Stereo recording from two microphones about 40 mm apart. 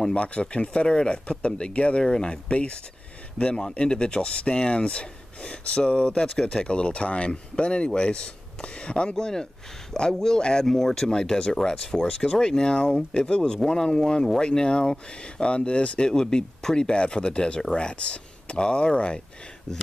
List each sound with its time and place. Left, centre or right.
0.1 s speech: left
2.0 s speech: centre
3.7 s speech: left
14.4 s speech: left
16.1 s speech: centre